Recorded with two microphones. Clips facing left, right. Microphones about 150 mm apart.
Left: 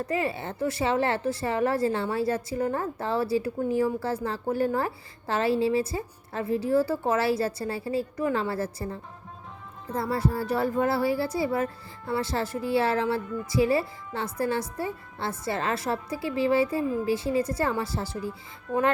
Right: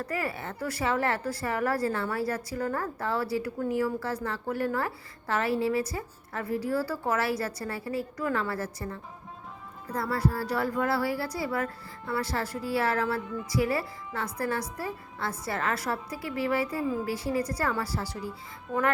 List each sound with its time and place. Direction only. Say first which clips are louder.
0.0 s speech: left 4 dB; 25° left (ahead or behind)